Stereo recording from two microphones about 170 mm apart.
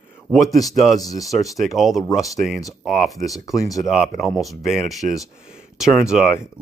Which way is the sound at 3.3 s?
20° left (ahead or behind).